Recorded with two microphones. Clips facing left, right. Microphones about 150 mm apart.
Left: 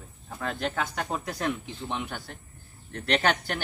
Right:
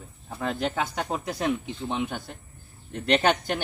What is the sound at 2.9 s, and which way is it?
Speech, 15° right (ahead or behind).